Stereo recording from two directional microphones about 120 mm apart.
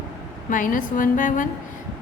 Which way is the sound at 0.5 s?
90° left.